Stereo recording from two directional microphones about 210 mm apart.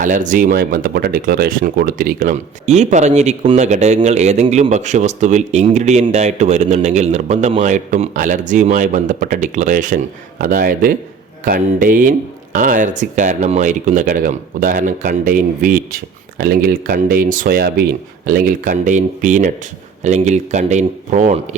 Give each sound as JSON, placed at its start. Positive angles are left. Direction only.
{"t": 0.0, "sound": "speech", "side_deg": -40}